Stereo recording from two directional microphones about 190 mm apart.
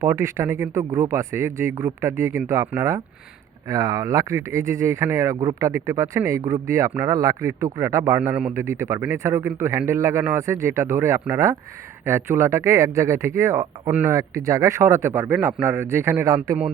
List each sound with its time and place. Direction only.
0.0 s speech: 15° right (ahead or behind)